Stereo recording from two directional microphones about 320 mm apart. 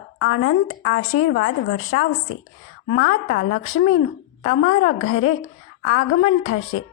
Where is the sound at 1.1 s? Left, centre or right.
Left.